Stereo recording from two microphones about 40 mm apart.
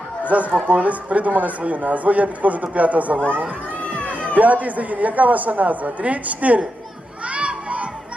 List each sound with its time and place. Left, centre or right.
0.3 s speech: right
4.4 s speech: right
7.3 s crowd: right